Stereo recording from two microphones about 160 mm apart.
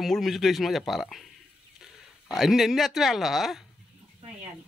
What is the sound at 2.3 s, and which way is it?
Speech, centre (ahead or behind).